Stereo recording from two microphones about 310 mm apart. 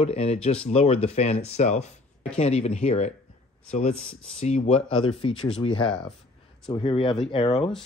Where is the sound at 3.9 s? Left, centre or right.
Centre.